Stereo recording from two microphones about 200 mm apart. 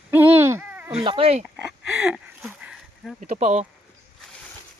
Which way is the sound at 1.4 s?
Centre (ahead or behind).